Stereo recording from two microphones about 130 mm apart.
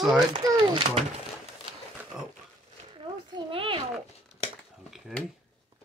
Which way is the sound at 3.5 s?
45° right (ahead or behind).